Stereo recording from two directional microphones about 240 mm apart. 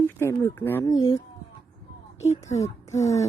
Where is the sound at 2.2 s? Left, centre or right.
Left.